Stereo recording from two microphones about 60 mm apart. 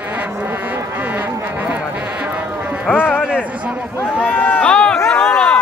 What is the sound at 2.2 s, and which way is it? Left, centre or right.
Sheep, right.